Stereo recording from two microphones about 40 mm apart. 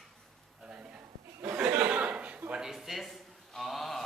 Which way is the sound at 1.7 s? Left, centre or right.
Right.